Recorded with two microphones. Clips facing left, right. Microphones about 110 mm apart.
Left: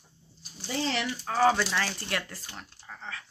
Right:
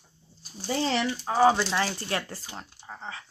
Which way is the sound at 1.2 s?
20° right (ahead or behind).